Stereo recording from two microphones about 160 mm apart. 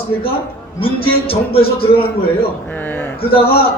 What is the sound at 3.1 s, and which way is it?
Speech, 35° left (ahead or behind).